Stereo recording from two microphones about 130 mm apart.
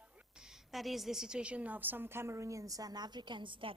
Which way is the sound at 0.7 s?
Centre (ahead or behind).